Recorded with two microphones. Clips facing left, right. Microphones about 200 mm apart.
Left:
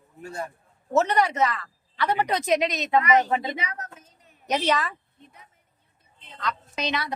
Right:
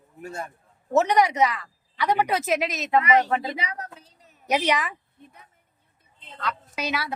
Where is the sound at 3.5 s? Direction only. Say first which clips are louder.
Right 1 dB; 30° right (ahead or behind).